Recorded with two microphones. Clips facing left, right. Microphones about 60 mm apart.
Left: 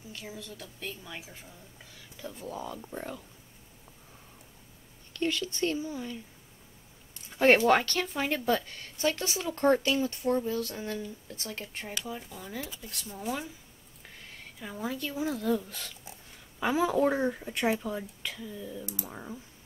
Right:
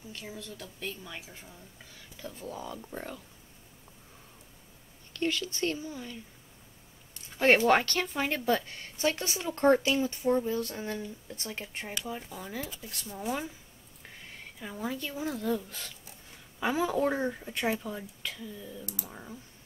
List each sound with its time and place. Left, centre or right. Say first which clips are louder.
0.5 s speech: right 1 dB; centre
5.8 s speech: left 4 dB; left
7.3 s speech: left 1 dB; centre
13.1 s speech: right 1 dB; centre